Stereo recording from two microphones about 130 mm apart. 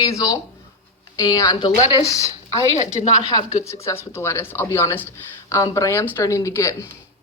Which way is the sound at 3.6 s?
20° left (ahead or behind).